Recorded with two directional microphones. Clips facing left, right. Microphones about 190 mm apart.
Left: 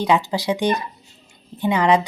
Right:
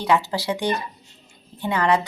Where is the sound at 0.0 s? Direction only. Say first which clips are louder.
Left 2 dB; 15° left (ahead or behind).